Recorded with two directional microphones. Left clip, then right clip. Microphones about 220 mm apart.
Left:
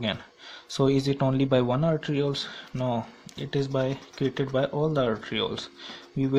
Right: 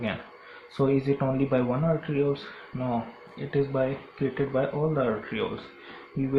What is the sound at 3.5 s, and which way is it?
Speech, 50° left (ahead or behind).